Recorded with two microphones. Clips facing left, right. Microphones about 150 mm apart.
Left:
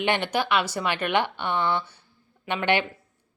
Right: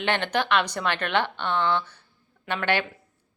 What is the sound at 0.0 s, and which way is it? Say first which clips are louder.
Speech: left 1 dB; 10° left (ahead or behind).